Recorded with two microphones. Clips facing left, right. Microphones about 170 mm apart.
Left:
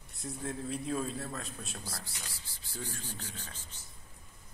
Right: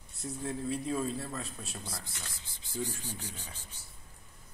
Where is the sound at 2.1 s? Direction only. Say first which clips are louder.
Right 1 dB; 15° left (ahead or behind).